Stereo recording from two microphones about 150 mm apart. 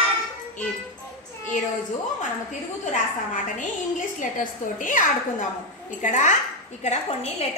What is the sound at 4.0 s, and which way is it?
A woman's voice, 60° left (ahead or behind).